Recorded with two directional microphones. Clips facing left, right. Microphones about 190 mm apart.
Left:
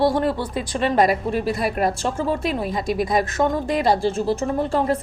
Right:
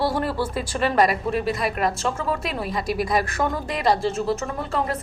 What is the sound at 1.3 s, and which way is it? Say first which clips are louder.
Speech: left 1 dB; centre (ahead or behind).